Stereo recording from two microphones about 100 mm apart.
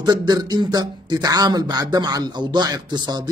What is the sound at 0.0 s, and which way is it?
Speech, 45° right (ahead or behind).